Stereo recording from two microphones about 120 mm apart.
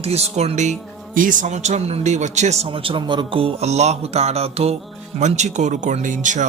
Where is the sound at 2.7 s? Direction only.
45° right (ahead or behind).